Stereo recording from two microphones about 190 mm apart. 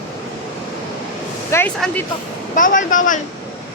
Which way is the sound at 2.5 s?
45° left (ahead or behind).